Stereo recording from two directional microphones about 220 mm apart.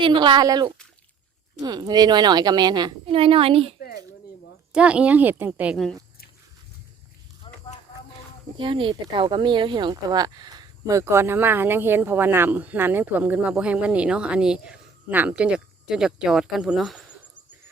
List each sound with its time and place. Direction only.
0.0 s a woman's voice: 20° right (ahead or behind)
3.8 s a sound: 45° left (ahead or behind)
4.7 s a woman's voice: 5° right (ahead or behind)
7.4 s clip-clop: 20° left (ahead or behind)
8.5 s speech: 25° right (ahead or behind); by 17.0 s 5° right (ahead or behind)